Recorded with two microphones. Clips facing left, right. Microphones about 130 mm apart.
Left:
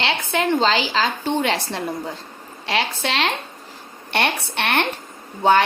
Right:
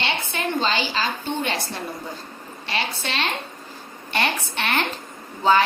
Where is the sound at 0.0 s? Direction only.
90° left.